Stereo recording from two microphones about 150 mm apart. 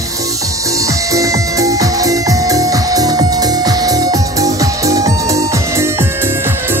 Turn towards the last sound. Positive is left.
turn(degrees=-20)  # may be behind; listen again after turning